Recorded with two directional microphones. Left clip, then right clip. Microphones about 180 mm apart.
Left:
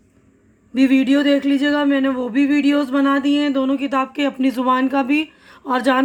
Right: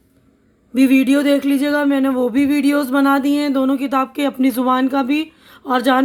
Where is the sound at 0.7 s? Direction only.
35° right (ahead or behind).